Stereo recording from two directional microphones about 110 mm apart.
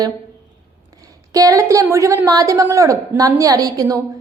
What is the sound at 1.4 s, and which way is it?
A woman's voice, 30° right (ahead or behind).